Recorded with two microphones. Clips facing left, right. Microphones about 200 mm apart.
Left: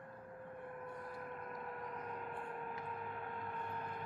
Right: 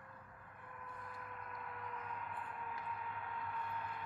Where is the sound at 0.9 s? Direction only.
40° left (ahead or behind).